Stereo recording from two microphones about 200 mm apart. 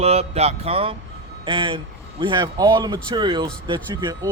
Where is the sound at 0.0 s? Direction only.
30° right (ahead or behind).